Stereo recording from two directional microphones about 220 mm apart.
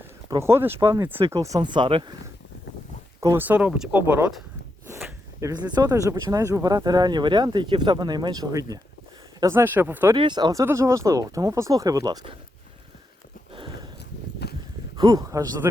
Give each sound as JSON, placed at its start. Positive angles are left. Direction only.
{"t": 0.3, "sound": "speech", "side_deg": -10}
{"t": 3.2, "sound": "speech", "side_deg": -10}
{"t": 10.2, "sound": "speech", "side_deg": -20}
{"t": 13.5, "sound": "a sound", "side_deg": -20}
{"t": 14.4, "sound": "a sound", "side_deg": 50}
{"t": 14.9, "sound": "speech", "side_deg": -15}